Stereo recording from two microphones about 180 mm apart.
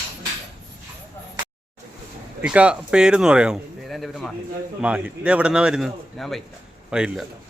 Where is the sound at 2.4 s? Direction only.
5° right (ahead or behind).